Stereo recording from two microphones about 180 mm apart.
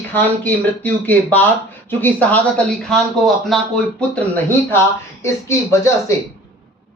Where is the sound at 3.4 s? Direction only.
5° left (ahead or behind).